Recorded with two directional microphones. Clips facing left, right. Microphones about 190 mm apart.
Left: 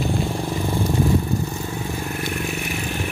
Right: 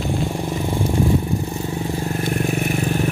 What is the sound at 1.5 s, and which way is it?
Vehicle, 25° right (ahead or behind).